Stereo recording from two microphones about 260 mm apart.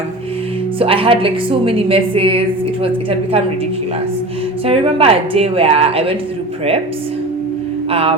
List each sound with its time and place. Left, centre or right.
0.8 s a woman's voice: right
4.6 s a woman's voice: right
7.9 s a sound: right